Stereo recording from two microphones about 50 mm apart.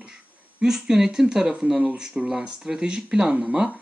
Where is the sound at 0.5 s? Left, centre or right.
Centre.